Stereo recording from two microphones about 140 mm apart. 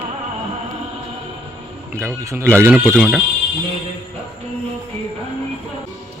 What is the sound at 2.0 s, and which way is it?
Speech, 20° right (ahead or behind).